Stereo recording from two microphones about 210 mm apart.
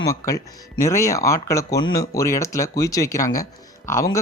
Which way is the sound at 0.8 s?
15° left (ahead or behind).